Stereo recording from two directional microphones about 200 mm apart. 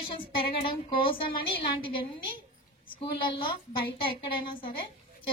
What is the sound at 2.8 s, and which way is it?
Speech, 25° left (ahead or behind).